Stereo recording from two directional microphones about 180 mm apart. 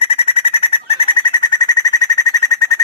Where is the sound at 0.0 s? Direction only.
30° left (ahead or behind).